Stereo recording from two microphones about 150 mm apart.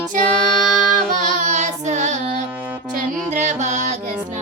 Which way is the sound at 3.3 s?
50° right (ahead or behind).